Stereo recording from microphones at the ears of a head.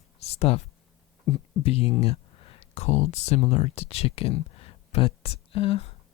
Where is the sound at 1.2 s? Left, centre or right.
Left.